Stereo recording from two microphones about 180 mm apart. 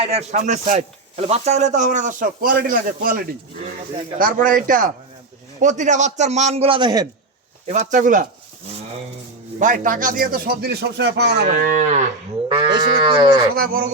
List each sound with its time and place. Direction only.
0.0 s a man's voice: 35° right (ahead or behind)
4.2 s a man's voice: 50° right (ahead or behind); by 7.1 s 20° right (ahead or behind)
7.7 s a man's voice: 45° right (ahead or behind)
9.6 s speech: 45° right (ahead or behind); by 11.4 s 70° right (ahead or behind)
11.4 s a man's voice: 45° right (ahead or behind)
12.5 s speech: 25° right (ahead or behind)